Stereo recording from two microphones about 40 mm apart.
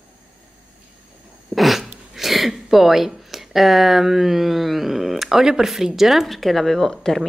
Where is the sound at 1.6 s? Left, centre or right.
Centre.